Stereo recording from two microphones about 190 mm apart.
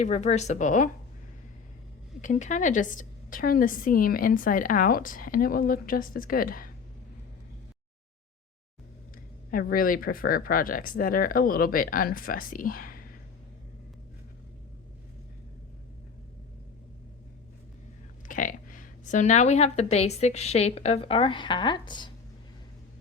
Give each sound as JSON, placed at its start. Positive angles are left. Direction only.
{"t": 0.0, "sound": "a woman's voice", "side_deg": 35}
{"t": 2.2, "sound": "a woman's voice", "side_deg": 40}
{"t": 9.5, "sound": "a woman's voice", "side_deg": 50}
{"t": 18.3, "sound": "a woman's voice", "side_deg": 45}